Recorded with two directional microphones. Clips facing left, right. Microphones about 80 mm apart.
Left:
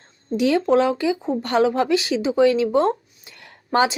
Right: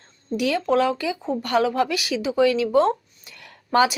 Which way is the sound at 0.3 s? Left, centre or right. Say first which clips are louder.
Left 3 dB; left.